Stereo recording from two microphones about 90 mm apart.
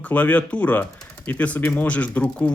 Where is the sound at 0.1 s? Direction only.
15° left (ahead or behind).